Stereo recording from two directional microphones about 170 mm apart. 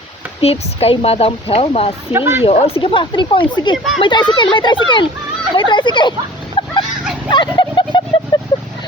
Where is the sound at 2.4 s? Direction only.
35° left (ahead or behind).